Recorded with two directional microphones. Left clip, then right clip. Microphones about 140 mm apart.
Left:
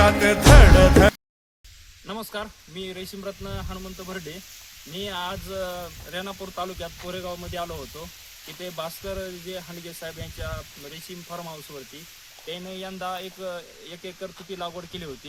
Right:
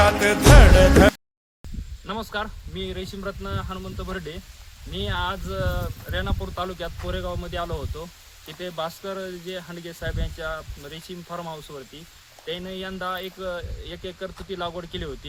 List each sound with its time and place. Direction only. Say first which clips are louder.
0.0 s speech: even; centre (ahead or behind); by 15.3 s 20° right (ahead or behind)